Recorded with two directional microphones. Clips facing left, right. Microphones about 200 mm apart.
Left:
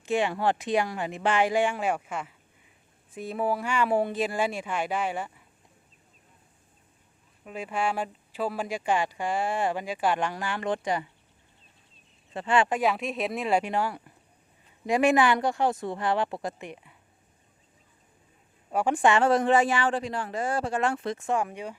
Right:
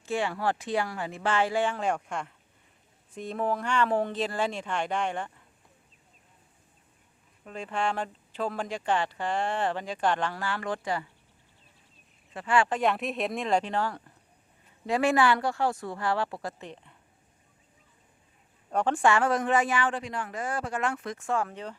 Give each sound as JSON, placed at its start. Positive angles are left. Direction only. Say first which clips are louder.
{"t": 0.0, "sound": "speech", "louder": "left 3 dB", "side_deg": 20}
{"t": 7.4, "sound": "speech", "louder": "left 1 dB", "side_deg": 10}
{"t": 12.3, "sound": "speech", "louder": "left 1 dB", "side_deg": 25}
{"t": 12.6, "sound": "speech", "louder": "left 1 dB", "side_deg": 5}
{"t": 18.7, "sound": "speech", "louder": "left 1 dB", "side_deg": 5}
{"t": 19.0, "sound": "speech", "louder": "left 4 dB", "side_deg": 25}